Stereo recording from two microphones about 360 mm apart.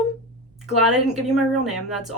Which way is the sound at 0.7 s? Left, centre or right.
Centre.